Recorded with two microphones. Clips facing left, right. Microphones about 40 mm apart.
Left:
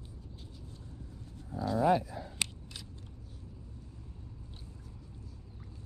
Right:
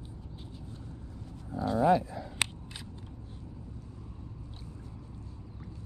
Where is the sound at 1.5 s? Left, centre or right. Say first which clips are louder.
Right 2 dB; right.